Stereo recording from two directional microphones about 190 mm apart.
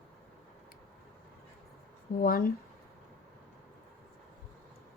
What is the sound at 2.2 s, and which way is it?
Speech, 50° left (ahead or behind).